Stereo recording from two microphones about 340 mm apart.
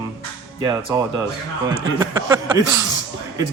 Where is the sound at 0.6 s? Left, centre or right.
Centre.